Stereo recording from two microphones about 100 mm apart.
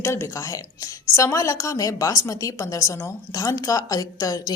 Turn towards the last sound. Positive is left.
turn(degrees=35)  # may be behind; listen again after turning